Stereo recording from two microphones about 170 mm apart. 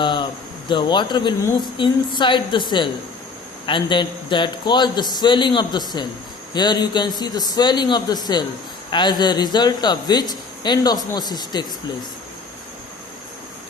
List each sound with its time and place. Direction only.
0.0 s a man's voice: 25° left (ahead or behind)